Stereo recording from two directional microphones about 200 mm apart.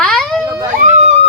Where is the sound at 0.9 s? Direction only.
35° right (ahead or behind).